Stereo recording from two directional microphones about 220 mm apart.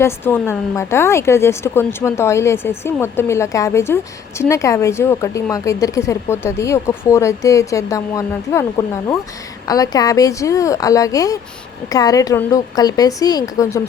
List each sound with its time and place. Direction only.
0.0 s speech: 10° left (ahead or behind)
9.6 s speech: 15° left (ahead or behind)